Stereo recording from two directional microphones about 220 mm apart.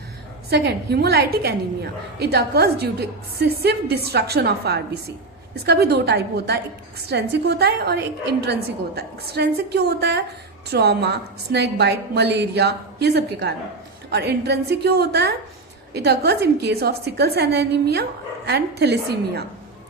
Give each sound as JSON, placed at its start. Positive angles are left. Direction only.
{"t": 0.5, "sound": "a woman's voice", "side_deg": -50}